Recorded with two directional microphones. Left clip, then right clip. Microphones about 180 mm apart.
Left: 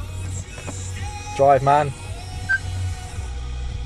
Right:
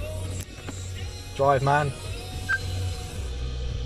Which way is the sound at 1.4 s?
35° left (ahead or behind).